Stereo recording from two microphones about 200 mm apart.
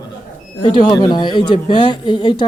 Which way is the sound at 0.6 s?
20° left (ahead or behind).